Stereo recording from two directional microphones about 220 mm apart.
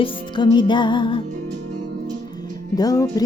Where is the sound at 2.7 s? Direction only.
15° left (ahead or behind).